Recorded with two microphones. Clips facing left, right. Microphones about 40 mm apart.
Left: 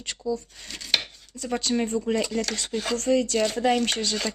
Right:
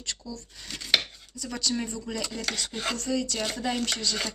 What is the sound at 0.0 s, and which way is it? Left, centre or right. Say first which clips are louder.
Speech: left 9 dB; left.